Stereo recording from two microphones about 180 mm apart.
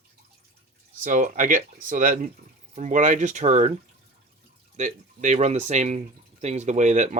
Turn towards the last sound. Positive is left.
turn(degrees=-40)  # may be behind; listen again after turning